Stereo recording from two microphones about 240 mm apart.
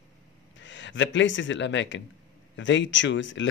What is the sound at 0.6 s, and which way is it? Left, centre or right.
Speech, left.